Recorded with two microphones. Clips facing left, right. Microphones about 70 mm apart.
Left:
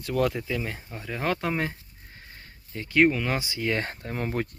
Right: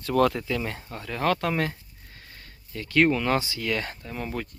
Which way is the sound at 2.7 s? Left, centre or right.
Left.